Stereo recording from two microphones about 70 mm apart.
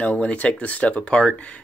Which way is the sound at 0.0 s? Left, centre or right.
Left.